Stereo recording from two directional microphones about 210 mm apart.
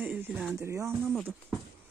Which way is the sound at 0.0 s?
10° right (ahead or behind).